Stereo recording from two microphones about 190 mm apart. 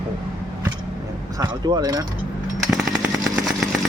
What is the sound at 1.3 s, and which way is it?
Speech, 20° right (ahead or behind).